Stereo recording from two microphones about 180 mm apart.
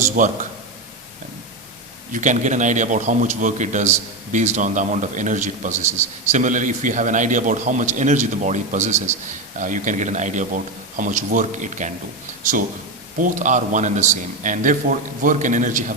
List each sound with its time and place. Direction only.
0.2 s a man's voice: 45° right (ahead or behind)
2.1 s a man's voice: 45° right (ahead or behind)
13.1 s a man's voice: 45° right (ahead or behind)